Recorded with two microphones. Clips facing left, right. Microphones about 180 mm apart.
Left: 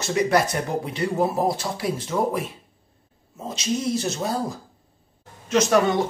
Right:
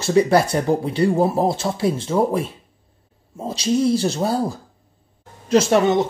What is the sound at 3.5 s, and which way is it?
Speech, 30° right (ahead or behind).